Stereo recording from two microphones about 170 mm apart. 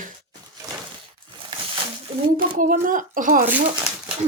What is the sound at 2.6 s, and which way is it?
Speech, 50° right (ahead or behind).